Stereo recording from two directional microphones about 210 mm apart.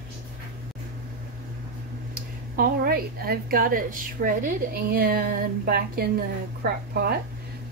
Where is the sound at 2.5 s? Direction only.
45° right (ahead or behind).